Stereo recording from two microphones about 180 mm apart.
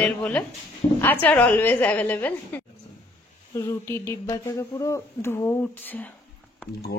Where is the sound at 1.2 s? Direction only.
10° left (ahead or behind).